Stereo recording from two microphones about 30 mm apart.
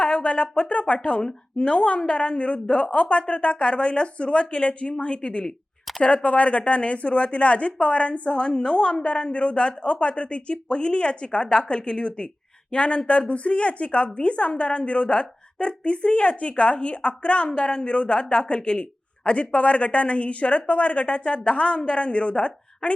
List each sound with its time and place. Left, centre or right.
0.0 s a sound: left
1.2 s a woman's voice: left
6.2 s a man's voice: left
17.5 s a man's voice: left